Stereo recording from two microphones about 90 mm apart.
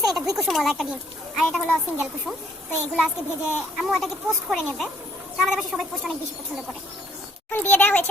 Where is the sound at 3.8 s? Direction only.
Centre (ahead or behind).